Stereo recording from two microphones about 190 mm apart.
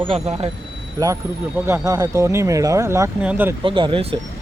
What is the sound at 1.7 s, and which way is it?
Speech, 15° right (ahead or behind).